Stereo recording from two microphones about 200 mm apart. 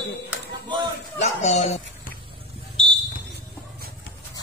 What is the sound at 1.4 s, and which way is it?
Speech, 35° left (ahead or behind).